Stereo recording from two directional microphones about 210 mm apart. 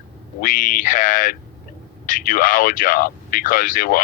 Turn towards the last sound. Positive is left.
turn(degrees=45)  # may be behind; listen again after turning